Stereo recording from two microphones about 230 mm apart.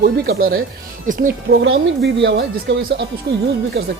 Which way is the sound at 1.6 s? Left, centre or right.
Right.